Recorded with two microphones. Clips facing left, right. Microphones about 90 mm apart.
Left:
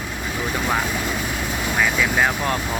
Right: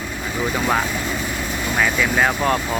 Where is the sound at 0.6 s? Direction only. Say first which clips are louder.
Right 2 dB; 10° right (ahead or behind).